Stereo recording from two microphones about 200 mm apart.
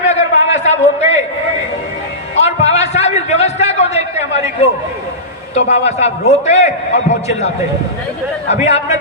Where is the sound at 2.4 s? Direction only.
35° left (ahead or behind).